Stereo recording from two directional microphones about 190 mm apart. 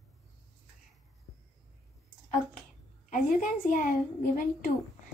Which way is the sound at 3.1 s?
45° left (ahead or behind).